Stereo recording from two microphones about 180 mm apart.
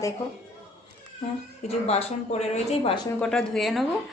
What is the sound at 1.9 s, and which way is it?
Speech, 35° left (ahead or behind).